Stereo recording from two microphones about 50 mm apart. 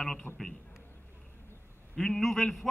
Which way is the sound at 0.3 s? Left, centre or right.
Left.